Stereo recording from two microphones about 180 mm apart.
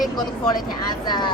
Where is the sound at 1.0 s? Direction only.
25° left (ahead or behind).